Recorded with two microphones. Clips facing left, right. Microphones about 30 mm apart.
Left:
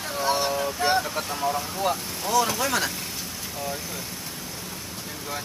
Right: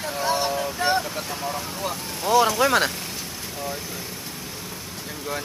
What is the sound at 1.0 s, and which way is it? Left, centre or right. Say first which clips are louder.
Speech: left 2 dB; centre.